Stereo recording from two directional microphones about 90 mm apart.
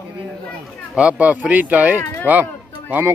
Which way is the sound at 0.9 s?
15° right (ahead or behind).